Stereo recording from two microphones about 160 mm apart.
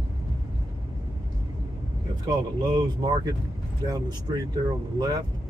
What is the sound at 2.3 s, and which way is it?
Speech, 25° right (ahead or behind).